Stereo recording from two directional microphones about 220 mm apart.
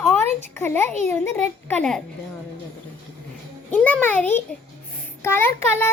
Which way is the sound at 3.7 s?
5° left (ahead or behind).